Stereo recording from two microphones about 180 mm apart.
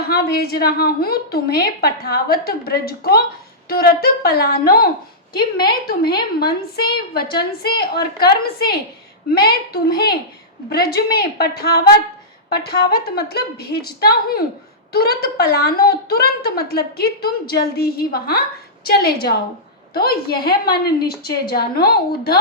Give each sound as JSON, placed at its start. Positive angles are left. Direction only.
{"t": 0.1, "sound": "a woman's voice", "side_deg": 60}